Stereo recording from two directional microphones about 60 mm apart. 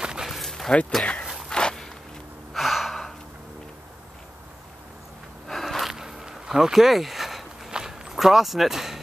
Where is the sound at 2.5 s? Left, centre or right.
Centre.